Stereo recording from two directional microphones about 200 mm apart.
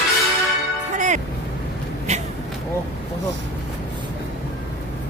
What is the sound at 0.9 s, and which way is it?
Music, 40° right (ahead or behind).